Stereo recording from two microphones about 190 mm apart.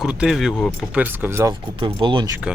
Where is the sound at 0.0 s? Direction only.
5° right (ahead or behind).